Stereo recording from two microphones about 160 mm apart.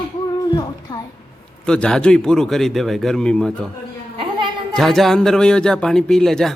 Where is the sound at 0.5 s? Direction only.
25° left (ahead or behind).